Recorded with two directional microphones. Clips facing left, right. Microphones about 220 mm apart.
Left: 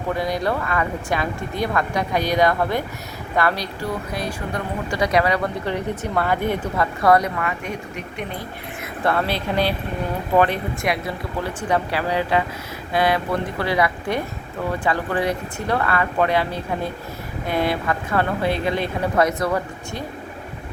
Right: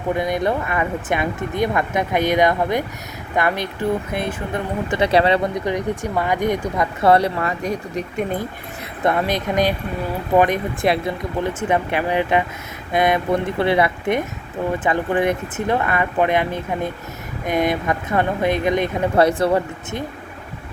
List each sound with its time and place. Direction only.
0.1 s speech: 20° right (ahead or behind)
5.6 s speech: 15° right (ahead or behind)
6.7 s a woman's voice: 25° right (ahead or behind)
9.0 s speech: 15° right (ahead or behind)
10.8 s speech: 30° right (ahead or behind)
19.1 s speech: 30° right (ahead or behind)